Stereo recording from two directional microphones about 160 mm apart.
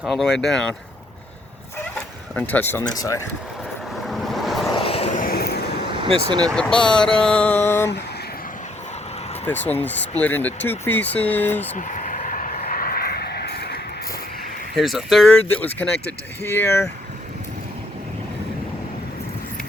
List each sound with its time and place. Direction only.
0.0 s speech: centre (ahead or behind)
2.3 s speech: 10° left (ahead or behind)
4.0 s vehicle: centre (ahead or behind)
4.7 s vehicle: 35° left (ahead or behind)
5.1 s vehicle: 70° left (ahead or behind)
6.6 s speech: 5° left (ahead or behind)
9.5 s speech: 10° left (ahead or behind)
11.8 s vehicle: 50° left (ahead or behind); by 13.8 s 90° left
14.8 s speech: centre (ahead or behind); by 16.8 s 15° left (ahead or behind)